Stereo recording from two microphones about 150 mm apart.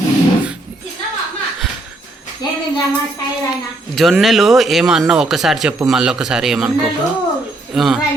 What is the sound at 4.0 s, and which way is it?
Speech, centre (ahead or behind).